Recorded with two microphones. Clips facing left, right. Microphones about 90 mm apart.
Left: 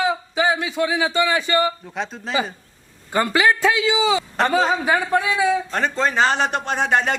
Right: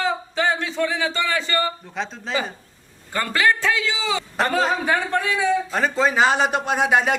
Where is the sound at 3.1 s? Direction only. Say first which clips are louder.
Left 2 dB; 15° left (ahead or behind).